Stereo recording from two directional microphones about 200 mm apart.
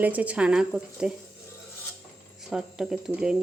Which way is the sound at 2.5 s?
Centre (ahead or behind).